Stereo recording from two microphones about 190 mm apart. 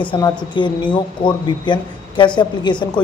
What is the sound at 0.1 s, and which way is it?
A woman's voice, 25° left (ahead or behind).